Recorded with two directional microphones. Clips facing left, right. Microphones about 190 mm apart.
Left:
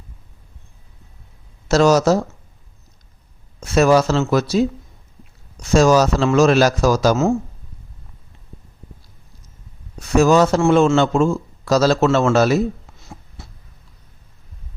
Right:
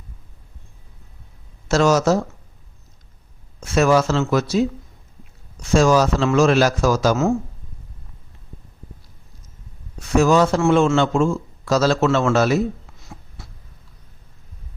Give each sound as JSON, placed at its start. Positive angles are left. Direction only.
{"t": 1.6, "sound": "speech", "side_deg": 35}
{"t": 3.6, "sound": "a man's voice", "side_deg": 35}
{"t": 5.6, "sound": "a man's voice", "side_deg": 40}
{"t": 10.0, "sound": "a man's voice", "side_deg": 40}